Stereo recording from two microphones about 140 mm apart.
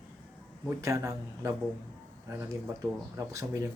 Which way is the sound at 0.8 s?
20° right (ahead or behind).